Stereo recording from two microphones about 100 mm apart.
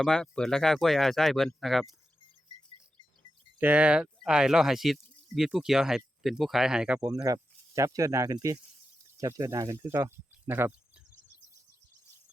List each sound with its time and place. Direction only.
0.0 s speech: 5° left (ahead or behind)
3.6 s speech: 15° right (ahead or behind)
7.3 s speech: 35° right (ahead or behind); by 11.0 s 15° right (ahead or behind)